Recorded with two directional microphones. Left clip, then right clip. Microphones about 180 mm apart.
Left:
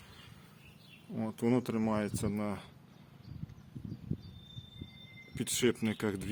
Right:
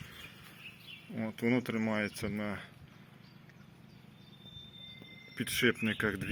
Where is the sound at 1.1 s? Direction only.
20° left (ahead or behind).